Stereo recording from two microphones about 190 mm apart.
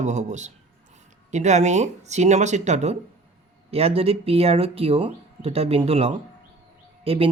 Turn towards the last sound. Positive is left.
turn(degrees=-30)  # may be behind; listen again after turning